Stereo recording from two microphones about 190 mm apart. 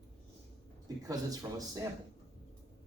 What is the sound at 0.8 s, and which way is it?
Speech, 20° right (ahead or behind).